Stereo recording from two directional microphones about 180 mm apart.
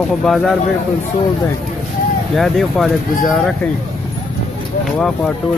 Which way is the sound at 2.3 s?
Centre (ahead or behind).